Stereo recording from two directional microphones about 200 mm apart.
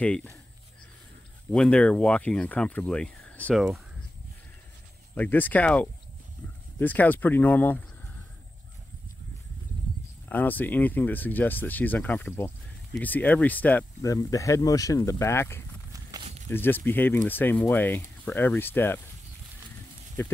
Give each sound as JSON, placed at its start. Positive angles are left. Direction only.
{"t": 0.0, "sound": "speech", "side_deg": 5}
{"t": 1.5, "sound": "speech", "side_deg": 5}
{"t": 5.1, "sound": "speech", "side_deg": 10}
{"t": 10.2, "sound": "speech", "side_deg": 10}
{"t": 15.9, "sound": "walk", "side_deg": -20}
{"t": 16.4, "sound": "speech", "side_deg": 10}
{"t": 20.2, "sound": "speech", "side_deg": 10}